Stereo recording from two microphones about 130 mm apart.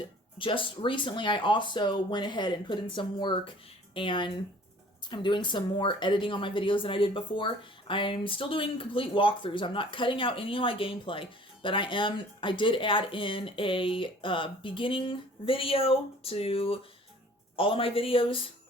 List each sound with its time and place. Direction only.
0.3 s speech: 40° left (ahead or behind)